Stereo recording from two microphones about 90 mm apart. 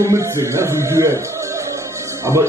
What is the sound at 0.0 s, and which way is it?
Speech, 35° right (ahead or behind).